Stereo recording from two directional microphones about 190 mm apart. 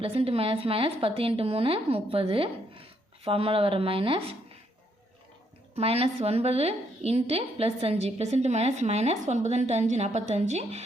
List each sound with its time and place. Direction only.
0.0 s a woman's voice: 30° right (ahead or behind)
5.7 s a woman's voice: 30° right (ahead or behind)